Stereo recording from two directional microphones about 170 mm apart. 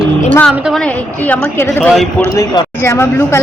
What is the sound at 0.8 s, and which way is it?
Speech, 10° left (ahead or behind).